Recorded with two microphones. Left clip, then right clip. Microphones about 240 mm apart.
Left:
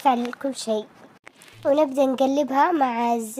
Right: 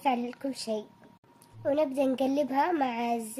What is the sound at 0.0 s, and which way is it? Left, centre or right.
A woman's voice, centre.